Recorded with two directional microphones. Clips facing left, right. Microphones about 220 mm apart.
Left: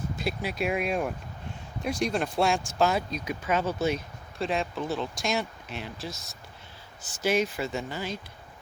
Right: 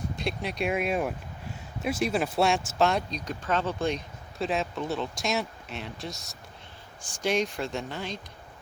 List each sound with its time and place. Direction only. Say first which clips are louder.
0.2 s speech: even; centre (ahead or behind)